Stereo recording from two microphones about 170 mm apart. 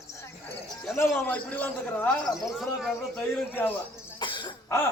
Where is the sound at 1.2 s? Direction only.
10° left (ahead or behind).